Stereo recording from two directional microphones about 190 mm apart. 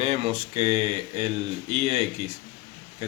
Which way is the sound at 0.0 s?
35° right (ahead or behind).